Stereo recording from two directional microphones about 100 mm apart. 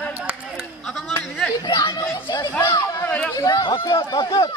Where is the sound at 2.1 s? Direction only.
50° left (ahead or behind).